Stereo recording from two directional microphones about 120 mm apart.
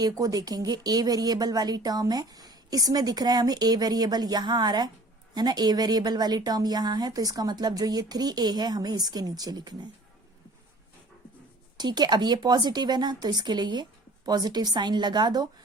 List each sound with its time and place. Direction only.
0.0 s speech: 30° right (ahead or behind)
11.8 s speech: 35° right (ahead or behind)